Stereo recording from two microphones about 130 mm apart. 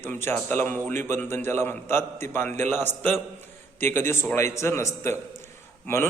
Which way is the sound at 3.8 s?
20° left (ahead or behind).